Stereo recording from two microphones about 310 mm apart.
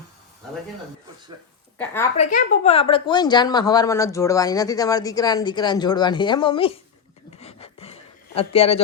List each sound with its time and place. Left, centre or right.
1.8 s speech: centre
2.1 s speech: left
7.3 s a sound: centre